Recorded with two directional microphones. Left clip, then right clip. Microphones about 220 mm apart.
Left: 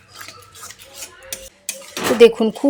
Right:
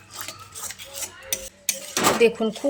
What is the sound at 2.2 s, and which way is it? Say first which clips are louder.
Speech: left 12 dB; 40° left (ahead or behind).